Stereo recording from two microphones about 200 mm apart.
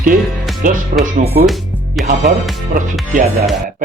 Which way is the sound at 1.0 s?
35° right (ahead or behind).